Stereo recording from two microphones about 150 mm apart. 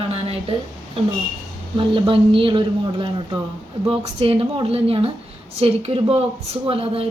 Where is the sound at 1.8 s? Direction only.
35° right (ahead or behind).